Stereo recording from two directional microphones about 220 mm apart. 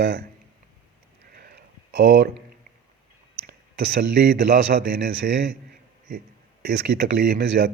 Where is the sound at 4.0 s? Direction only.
50° right (ahead or behind).